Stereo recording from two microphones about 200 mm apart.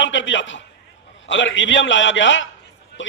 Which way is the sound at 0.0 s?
65° left (ahead or behind).